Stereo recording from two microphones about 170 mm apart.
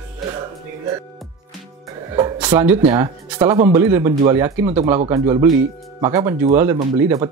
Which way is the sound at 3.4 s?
30° right (ahead or behind).